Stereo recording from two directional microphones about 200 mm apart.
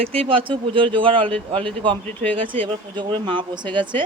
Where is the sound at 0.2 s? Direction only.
25° right (ahead or behind).